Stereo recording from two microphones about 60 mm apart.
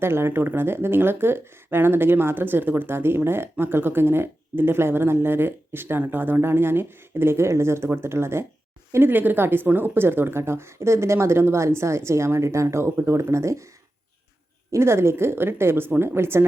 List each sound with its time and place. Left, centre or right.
0.0 s speech: right
14.7 s speech: right